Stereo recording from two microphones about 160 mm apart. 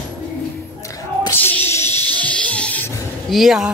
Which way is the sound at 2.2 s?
10° left (ahead or behind).